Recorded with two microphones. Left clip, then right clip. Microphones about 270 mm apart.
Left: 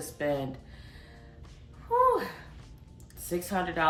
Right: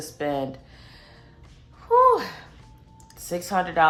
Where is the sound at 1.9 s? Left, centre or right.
Right.